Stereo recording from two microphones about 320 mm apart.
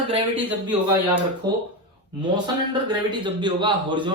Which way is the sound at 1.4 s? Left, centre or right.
Centre.